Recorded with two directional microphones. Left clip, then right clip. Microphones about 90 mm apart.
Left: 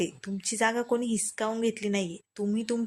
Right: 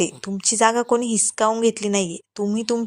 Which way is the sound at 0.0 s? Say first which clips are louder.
Right 9 dB; 50° right (ahead or behind).